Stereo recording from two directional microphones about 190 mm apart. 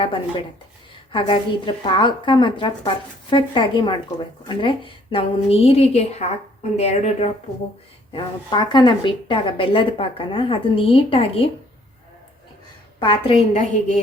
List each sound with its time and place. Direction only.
1.1 s a woman's voice: 25° left (ahead or behind)
8.1 s a woman's voice: 25° left (ahead or behind)
13.0 s a woman's voice: 30° left (ahead or behind)